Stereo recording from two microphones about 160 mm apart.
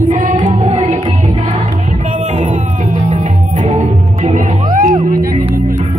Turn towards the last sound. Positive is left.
turn(degrees=-55)  # may be behind; listen again after turning